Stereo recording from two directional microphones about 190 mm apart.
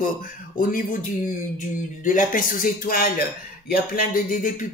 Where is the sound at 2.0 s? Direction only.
45° left (ahead or behind).